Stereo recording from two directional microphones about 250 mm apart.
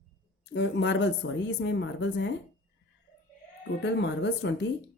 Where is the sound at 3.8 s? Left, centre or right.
Left.